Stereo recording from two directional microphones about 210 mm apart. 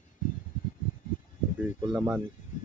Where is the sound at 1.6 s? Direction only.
5° right (ahead or behind).